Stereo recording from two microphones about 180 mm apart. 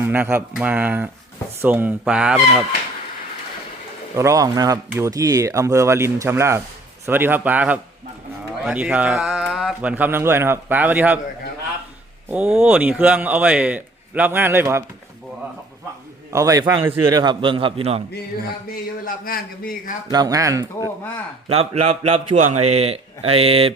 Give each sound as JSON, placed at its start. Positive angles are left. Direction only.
{"t": 0.0, "sound": "speech", "side_deg": -10}
{"t": 4.1, "sound": "speech", "side_deg": -15}
{"t": 12.3, "sound": "speech", "side_deg": -10}
{"t": 16.3, "sound": "a man's voice", "side_deg": -20}
{"t": 19.0, "sound": "a man's voice", "side_deg": 55}
{"t": 20.1, "sound": "a man's voice", "side_deg": -20}
{"t": 21.5, "sound": "a man's voice", "side_deg": -35}